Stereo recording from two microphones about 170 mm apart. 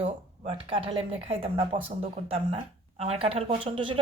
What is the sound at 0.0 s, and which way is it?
Speech, 35° right (ahead or behind).